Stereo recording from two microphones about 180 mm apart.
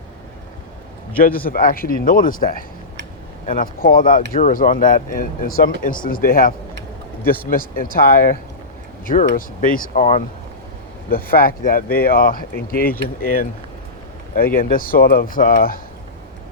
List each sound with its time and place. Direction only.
1.2 s speech: 50° left (ahead or behind)
11.1 s speech: 55° left (ahead or behind)